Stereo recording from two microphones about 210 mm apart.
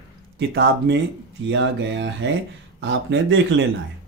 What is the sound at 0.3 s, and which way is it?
Speech, 55° right (ahead or behind).